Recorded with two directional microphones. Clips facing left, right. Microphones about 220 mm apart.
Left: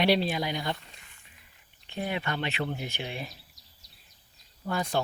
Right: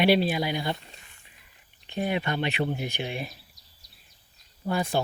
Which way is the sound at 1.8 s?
15° right (ahead or behind).